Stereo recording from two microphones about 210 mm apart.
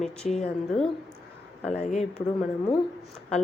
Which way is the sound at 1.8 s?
35° left (ahead or behind).